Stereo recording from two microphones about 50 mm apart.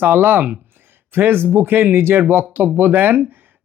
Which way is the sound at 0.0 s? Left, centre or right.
Right.